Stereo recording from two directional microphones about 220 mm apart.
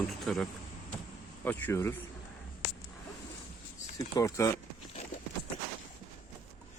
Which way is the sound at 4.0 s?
15° left (ahead or behind).